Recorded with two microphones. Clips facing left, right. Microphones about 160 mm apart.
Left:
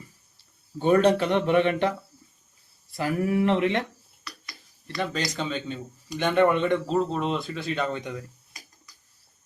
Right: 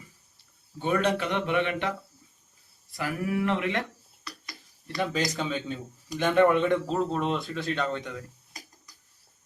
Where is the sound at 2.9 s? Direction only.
30° left (ahead or behind).